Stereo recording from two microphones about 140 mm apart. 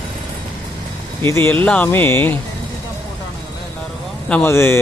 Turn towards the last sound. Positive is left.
turn(degrees=20)  # may be behind; listen again after turning